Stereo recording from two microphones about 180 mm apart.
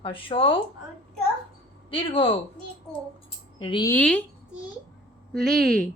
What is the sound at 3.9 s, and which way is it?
Speech, 10° left (ahead or behind).